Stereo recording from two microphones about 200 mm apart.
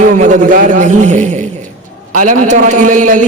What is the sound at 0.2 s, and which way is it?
A man's voice, 40° right (ahead or behind).